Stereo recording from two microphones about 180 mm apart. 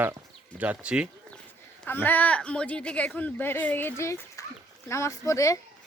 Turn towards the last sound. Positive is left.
turn(degrees=20)  # may be behind; listen again after turning